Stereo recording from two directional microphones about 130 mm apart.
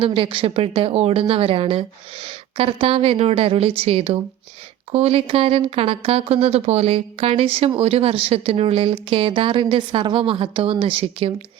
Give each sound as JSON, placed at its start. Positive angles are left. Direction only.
{"t": 0.0, "sound": "speech", "side_deg": -45}